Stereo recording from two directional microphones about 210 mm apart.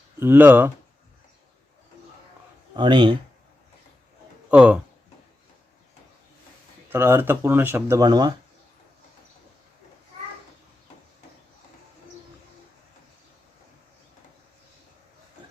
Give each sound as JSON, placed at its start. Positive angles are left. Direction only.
{"t": 0.2, "sound": "speech", "side_deg": -10}
{"t": 2.7, "sound": "speech", "side_deg": -20}
{"t": 4.5, "sound": "speech", "side_deg": -5}
{"t": 6.9, "sound": "speech", "side_deg": -10}